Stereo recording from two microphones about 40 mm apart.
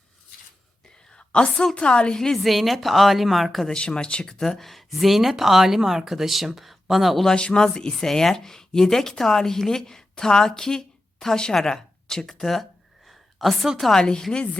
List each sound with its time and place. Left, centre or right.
1.1 s a sound: left
1.8 s a woman's voice: left
2.4 s speech: centre
3.7 s speech: left; by 7.3 s centre
7.3 s speech: left
13.1 s a sound: centre
13.9 s speech: centre